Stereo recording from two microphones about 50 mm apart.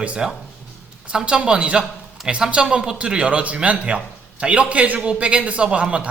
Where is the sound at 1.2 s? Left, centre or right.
Centre.